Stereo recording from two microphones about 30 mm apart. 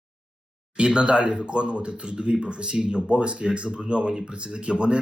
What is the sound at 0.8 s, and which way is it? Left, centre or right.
Speech, right.